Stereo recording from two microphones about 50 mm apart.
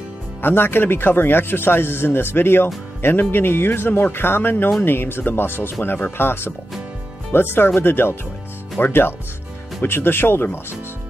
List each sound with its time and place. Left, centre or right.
0.4 s speech: left